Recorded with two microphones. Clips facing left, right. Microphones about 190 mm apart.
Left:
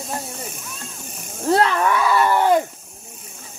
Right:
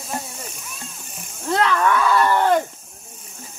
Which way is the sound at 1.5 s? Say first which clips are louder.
Left 2 dB; 25° left (ahead or behind).